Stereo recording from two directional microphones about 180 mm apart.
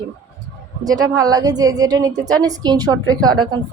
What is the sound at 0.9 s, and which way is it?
A woman's voice, 20° right (ahead or behind).